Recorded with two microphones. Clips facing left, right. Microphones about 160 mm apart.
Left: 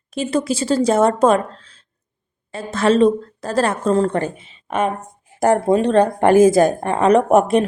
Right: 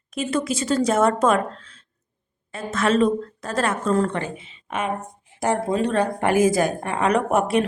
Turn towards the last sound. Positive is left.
turn(degrees=40)  # may be behind; listen again after turning